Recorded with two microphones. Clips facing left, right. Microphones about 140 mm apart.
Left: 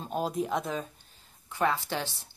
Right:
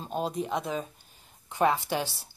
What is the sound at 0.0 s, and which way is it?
Speech, centre (ahead or behind).